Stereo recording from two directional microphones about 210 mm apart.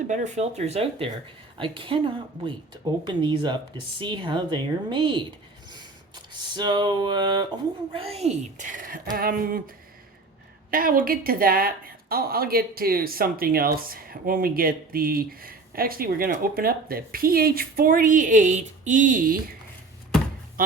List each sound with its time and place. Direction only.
0.1 s speech: 35° right (ahead or behind)
5.7 s a sound: 20° right (ahead or behind)
7.9 s a woman's voice: 30° right (ahead or behind)
10.7 s speech: 45° right (ahead or behind)